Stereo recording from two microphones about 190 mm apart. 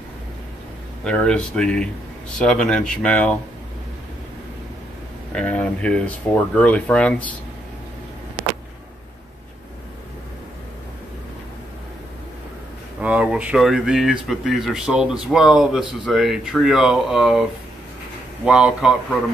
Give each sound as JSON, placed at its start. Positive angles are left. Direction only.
{"t": 1.0, "sound": "speech", "side_deg": 5}
{"t": 5.3, "sound": "speech", "side_deg": 5}
{"t": 13.0, "sound": "speech", "side_deg": -5}